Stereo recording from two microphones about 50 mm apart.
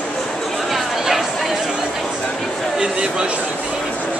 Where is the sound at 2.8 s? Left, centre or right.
Centre.